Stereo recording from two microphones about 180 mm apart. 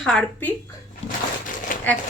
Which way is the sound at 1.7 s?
50° left (ahead or behind).